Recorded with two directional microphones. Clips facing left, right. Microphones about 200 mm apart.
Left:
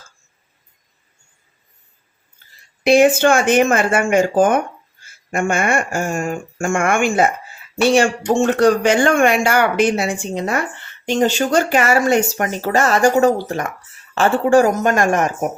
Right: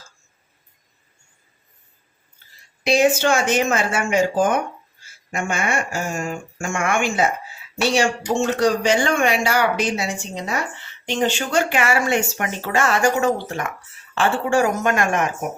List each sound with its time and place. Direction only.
2.8 s a woman's voice: 55° left (ahead or behind)